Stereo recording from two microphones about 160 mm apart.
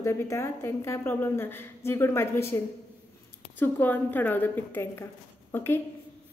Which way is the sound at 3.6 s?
10° left (ahead or behind).